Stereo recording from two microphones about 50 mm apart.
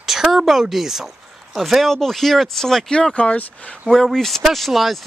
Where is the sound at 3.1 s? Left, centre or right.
Left.